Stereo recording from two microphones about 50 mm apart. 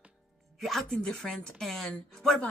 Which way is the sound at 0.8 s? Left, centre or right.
Centre.